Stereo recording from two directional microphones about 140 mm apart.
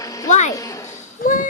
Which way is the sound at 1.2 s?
70° left (ahead or behind).